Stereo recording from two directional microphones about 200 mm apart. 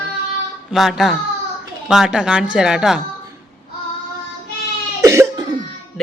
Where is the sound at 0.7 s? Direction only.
Centre (ahead or behind).